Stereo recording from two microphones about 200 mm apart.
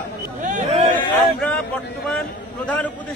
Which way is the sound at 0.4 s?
40° right (ahead or behind).